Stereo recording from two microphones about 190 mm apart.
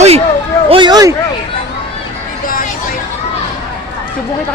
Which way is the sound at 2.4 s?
45° left (ahead or behind).